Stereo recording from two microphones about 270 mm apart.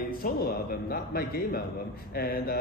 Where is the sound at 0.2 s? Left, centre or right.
Left.